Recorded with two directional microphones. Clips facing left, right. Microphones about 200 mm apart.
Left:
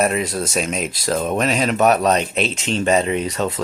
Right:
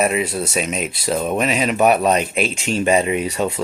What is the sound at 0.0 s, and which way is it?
Speech, 5° right (ahead or behind).